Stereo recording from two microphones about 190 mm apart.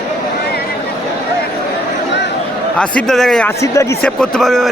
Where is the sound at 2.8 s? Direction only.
5° left (ahead or behind).